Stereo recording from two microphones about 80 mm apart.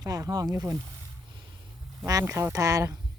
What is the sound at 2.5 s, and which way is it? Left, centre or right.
Speech, right.